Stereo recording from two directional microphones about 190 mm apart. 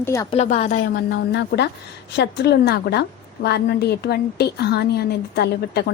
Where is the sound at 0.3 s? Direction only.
35° left (ahead or behind).